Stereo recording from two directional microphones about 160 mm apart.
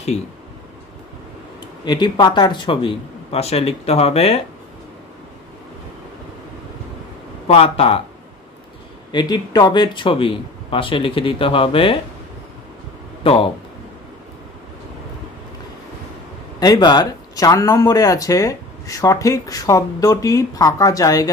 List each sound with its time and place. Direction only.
1.9 s speech: 25° left (ahead or behind)
7.4 s speech: 40° left (ahead or behind)
9.1 s speech: 25° left (ahead or behind)
13.2 s speech: 35° left (ahead or behind)
16.5 s speech: 25° left (ahead or behind)